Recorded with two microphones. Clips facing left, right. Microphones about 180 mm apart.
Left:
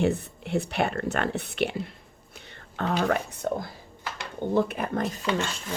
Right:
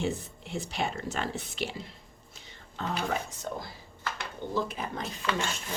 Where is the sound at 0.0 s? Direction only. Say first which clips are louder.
Left 7 dB; 60° left (ahead or behind).